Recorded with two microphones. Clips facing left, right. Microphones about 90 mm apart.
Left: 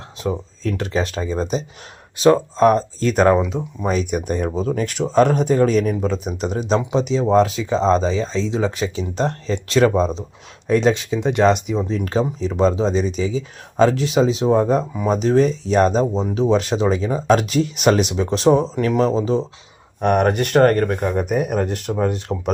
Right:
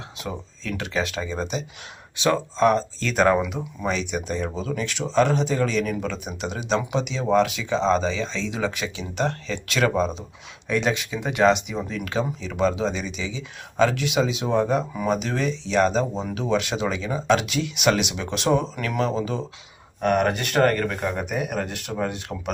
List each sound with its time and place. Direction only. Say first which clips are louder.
0.2 s speech: left 10 dB; 35° left (ahead or behind)
3.3 s speech: left 5 dB; 30° left (ahead or behind); by 4.4 s 50° left (ahead or behind)
4.4 s speech: left 6 dB; 40° left (ahead or behind)
16.2 s speech: left 6 dB; 30° left (ahead or behind)
20.1 s speech: left 6 dB; 45° left (ahead or behind)